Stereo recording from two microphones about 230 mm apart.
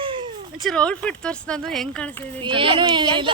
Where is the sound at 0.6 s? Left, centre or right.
Centre.